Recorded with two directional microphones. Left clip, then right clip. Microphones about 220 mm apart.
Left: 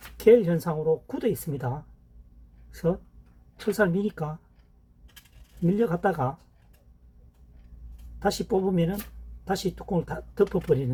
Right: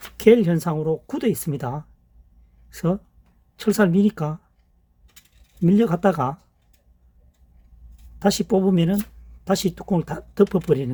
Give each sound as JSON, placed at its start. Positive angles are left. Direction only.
{"t": 0.2, "sound": "speech", "side_deg": -50}
{"t": 5.6, "sound": "speech", "side_deg": -50}
{"t": 8.2, "sound": "speech", "side_deg": -50}